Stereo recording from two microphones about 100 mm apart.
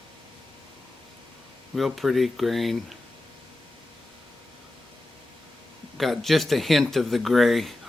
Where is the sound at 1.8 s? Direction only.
Centre (ahead or behind).